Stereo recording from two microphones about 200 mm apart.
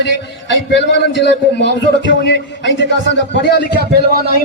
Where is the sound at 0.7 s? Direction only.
60° left (ahead or behind).